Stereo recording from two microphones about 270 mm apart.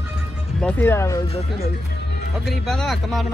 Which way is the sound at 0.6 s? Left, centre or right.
Centre.